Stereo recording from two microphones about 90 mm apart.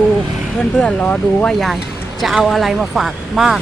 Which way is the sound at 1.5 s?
Centre (ahead or behind).